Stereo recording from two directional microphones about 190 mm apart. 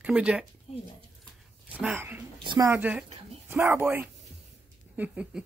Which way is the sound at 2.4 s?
20° right (ahead or behind).